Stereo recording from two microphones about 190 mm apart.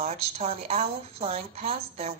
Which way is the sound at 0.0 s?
35° right (ahead or behind).